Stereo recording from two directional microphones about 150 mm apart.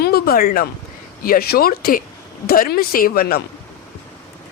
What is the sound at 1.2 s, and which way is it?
A woman's voice, 80° left.